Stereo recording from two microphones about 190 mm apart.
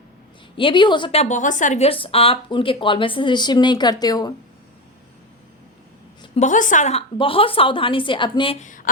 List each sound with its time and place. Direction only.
0.5 s a woman's voice: 25° left (ahead or behind)
6.3 s a woman's voice: 40° left (ahead or behind)
8.6 s a sound: 45° left (ahead or behind)